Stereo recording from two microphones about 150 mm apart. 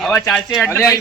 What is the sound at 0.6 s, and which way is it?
Speech, 15° left (ahead or behind).